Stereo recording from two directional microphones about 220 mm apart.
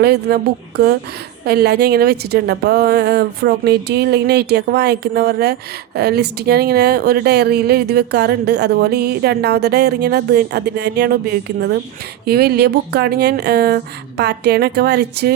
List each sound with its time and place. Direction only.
0.0 s a woman's voice: 45° right (ahead or behind)
1.5 s a woman's voice: 45° right (ahead or behind)
12.2 s a woman's voice: 45° right (ahead or behind)